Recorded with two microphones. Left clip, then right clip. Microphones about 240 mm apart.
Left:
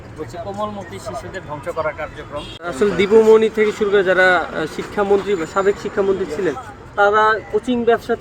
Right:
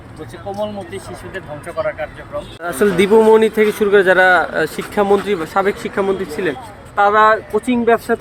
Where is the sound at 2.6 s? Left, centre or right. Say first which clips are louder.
Right 3 dB; right.